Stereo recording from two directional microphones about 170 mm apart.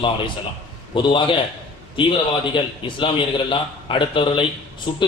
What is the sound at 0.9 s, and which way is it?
A man's voice, 30° left (ahead or behind).